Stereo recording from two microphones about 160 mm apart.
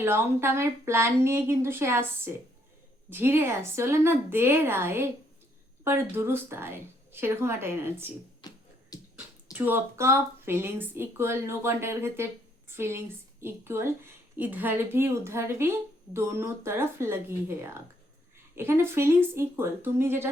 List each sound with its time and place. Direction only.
0.0 s a woman's voice: 15° right (ahead or behind)
8.4 s music: 25° left (ahead or behind)
9.1 s a woman's voice: 10° right (ahead or behind)